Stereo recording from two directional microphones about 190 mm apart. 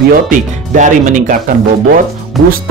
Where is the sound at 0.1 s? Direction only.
45° right (ahead or behind).